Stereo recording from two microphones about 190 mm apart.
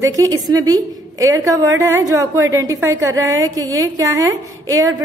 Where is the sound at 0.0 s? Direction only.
15° right (ahead or behind).